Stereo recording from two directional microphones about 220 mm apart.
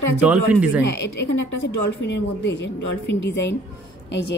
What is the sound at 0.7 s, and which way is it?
A woman's voice, 55° left (ahead or behind).